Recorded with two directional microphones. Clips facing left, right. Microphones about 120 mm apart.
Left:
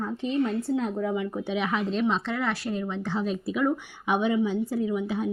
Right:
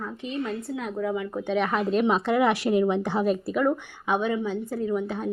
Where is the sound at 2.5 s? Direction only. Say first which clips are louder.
Right 8 dB; 75° right (ahead or behind).